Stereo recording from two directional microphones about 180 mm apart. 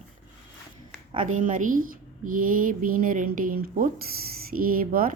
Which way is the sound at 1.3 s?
45° right (ahead or behind).